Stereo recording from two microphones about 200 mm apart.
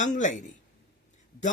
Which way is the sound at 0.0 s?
40° left (ahead or behind).